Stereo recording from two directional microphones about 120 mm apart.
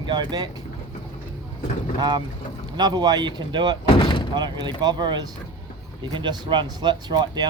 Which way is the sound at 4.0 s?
45° left (ahead or behind).